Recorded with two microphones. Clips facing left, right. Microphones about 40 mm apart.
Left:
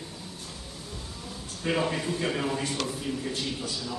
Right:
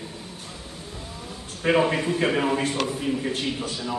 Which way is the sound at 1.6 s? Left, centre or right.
Right.